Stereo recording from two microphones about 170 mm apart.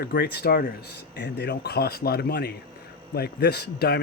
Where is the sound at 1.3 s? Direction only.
75° left (ahead or behind).